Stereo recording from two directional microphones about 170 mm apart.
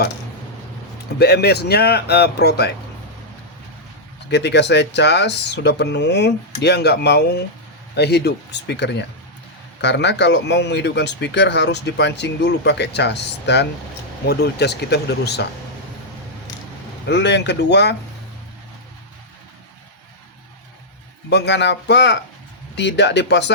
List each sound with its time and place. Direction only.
1.2 s speech: 75° left (ahead or behind)
4.3 s speech: 85° left
14.3 s speech: 75° left (ahead or behind)
17.1 s speech: 90° left
21.2 s speech: 90° left